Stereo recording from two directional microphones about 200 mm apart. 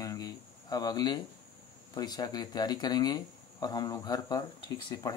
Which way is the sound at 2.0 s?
20° left (ahead or behind).